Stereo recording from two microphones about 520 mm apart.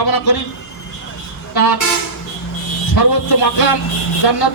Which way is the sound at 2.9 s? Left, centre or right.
Left.